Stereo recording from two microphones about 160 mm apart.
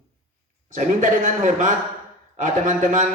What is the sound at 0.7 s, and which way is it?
Speech, 50° right (ahead or behind).